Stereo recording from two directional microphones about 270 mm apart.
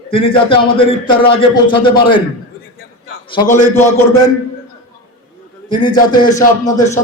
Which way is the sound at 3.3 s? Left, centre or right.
Centre.